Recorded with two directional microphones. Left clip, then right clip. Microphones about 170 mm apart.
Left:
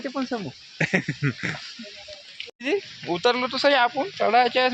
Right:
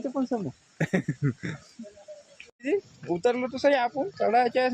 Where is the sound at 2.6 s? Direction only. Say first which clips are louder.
Left 2 dB; 5° right (ahead or behind).